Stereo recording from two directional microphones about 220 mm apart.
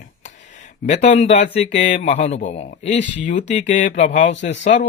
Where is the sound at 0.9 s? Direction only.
30° left (ahead or behind).